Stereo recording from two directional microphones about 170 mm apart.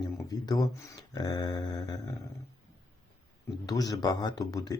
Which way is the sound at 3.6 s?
20° left (ahead or behind).